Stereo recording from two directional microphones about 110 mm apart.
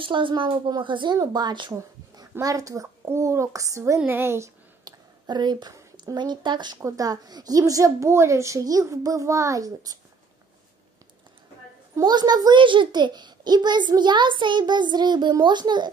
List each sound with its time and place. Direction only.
0.0 s a woman's voice: 50° right (ahead or behind)
1.8 s a child's voice: 30° right (ahead or behind)
4.8 s a woman's voice: 40° right (ahead or behind)
6.8 s a child's voice: 30° right (ahead or behind)
12.0 s a child's voice: 40° right (ahead or behind)